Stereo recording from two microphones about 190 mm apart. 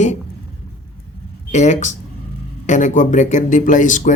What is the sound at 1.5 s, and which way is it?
Speech, 40° left (ahead or behind).